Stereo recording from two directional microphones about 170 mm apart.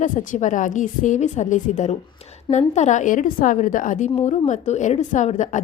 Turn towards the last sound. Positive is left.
turn(degrees=45)  # may be behind; listen again after turning